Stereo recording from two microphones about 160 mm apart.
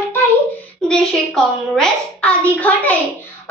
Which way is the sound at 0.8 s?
5° left (ahead or behind).